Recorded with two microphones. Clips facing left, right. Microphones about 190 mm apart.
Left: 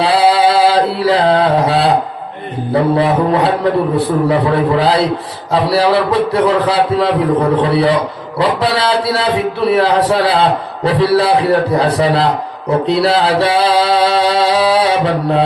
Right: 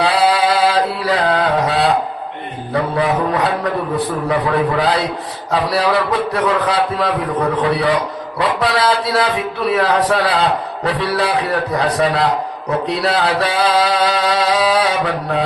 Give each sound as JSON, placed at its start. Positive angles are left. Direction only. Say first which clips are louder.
{"t": 0.0, "sound": "carnatic music", "louder": "left 4 dB", "side_deg": 30}
{"t": 2.7, "sound": "music", "louder": "left 5 dB", "side_deg": 30}
{"t": 4.8, "sound": "a man's voice", "louder": "left 4 dB", "side_deg": 30}
{"t": 5.5, "sound": "music", "louder": "left 4 dB", "side_deg": 30}